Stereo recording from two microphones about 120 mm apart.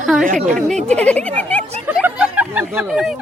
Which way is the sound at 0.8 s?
10° left (ahead or behind).